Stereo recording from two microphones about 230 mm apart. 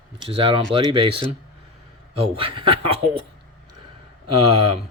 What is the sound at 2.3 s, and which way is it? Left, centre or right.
Speech, right.